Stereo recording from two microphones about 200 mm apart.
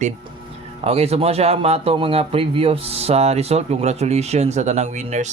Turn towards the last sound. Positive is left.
turn(degrees=-35)  # may be behind; listen again after turning